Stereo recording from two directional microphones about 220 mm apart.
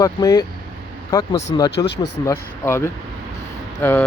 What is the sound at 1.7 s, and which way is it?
Speech, 50° left (ahead or behind).